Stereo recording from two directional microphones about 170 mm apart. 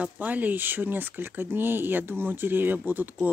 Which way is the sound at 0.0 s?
10° right (ahead or behind).